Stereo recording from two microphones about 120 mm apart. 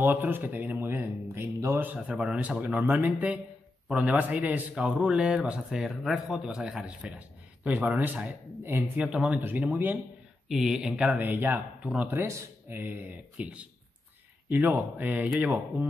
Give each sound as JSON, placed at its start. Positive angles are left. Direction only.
{"t": 0.0, "sound": "speech", "side_deg": -15}
{"t": 1.9, "sound": "speech", "side_deg": -10}
{"t": 10.5, "sound": "speech", "side_deg": -5}